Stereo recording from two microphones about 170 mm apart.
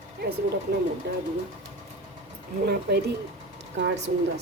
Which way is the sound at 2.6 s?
70° right (ahead or behind).